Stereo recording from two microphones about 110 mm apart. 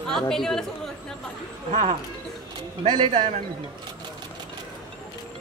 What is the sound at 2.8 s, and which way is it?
Speech, 45° right (ahead or behind).